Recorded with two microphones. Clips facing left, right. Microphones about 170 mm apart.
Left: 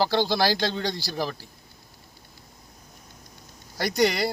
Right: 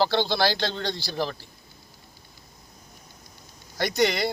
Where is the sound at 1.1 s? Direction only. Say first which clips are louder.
Right 1 dB; 5° left (ahead or behind).